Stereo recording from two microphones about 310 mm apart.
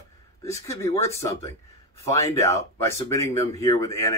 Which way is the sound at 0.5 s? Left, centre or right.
Centre.